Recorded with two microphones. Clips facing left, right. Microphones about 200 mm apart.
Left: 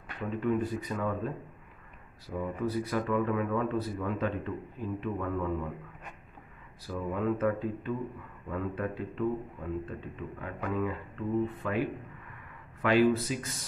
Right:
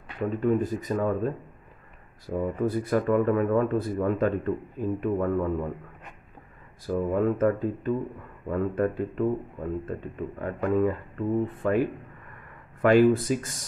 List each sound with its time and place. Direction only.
0.4 s speech: 40° right (ahead or behind)
6.9 s speech: 45° right (ahead or behind)